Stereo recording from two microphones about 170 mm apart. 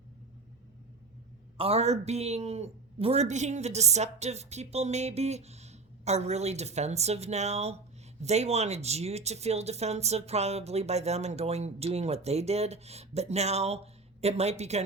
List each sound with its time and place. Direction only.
1.5 s speech: 35° right (ahead or behind)